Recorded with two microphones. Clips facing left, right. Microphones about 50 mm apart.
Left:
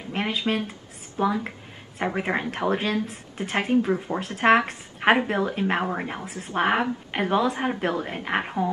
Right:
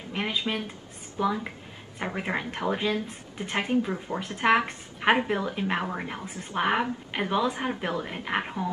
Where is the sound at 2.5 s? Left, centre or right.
Left.